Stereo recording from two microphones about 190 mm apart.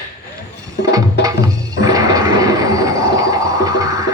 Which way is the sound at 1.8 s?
20° right (ahead or behind).